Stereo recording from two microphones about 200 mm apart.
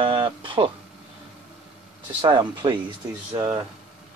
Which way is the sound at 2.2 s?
20° right (ahead or behind).